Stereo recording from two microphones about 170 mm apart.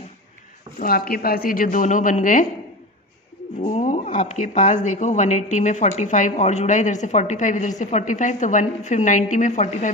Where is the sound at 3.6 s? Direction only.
40° left (ahead or behind).